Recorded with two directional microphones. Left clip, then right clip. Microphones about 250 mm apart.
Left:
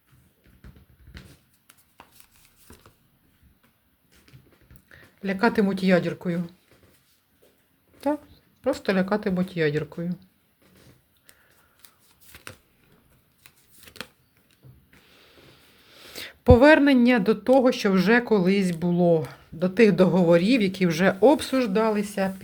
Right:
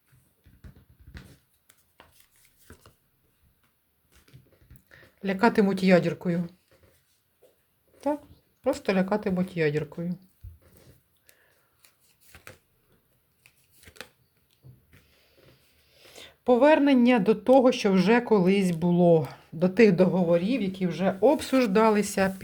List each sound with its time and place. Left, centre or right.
4.9 s speech: centre
7.9 s a sound: centre
8.6 s speech: centre
15.9 s speech: left; by 20.1 s centre
20.1 s speech: left
21.3 s speech: centre